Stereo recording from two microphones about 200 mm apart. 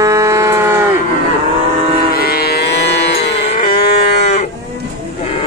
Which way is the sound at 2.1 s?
50° left (ahead or behind).